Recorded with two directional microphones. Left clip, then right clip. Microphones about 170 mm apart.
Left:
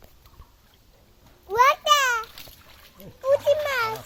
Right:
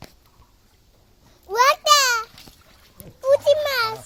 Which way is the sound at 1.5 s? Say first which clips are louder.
Right 2 dB; 30° right (ahead or behind).